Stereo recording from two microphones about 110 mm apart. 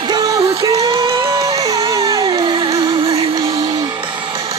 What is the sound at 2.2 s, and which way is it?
Music, 45° right (ahead or behind).